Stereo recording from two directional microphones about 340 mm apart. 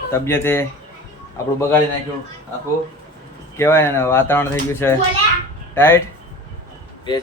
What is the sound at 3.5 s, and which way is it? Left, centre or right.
Speech, centre.